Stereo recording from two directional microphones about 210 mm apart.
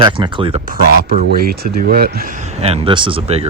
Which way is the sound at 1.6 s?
45° right (ahead or behind).